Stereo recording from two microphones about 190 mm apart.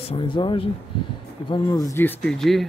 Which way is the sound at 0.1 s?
25° left (ahead or behind).